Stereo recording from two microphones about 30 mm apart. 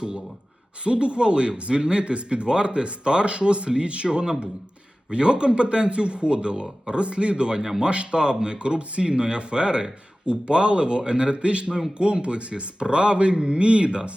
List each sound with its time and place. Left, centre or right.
0.9 s a man's voice: right